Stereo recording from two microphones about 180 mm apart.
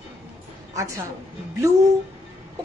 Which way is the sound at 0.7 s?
20° right (ahead or behind).